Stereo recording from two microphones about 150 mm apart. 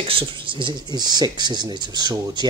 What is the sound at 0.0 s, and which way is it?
Speech, 35° right (ahead or behind).